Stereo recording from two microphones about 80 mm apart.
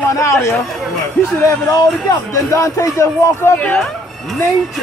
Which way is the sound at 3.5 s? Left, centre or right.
Centre.